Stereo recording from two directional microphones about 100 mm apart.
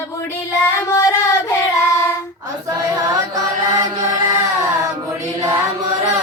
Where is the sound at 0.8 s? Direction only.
35° left (ahead or behind).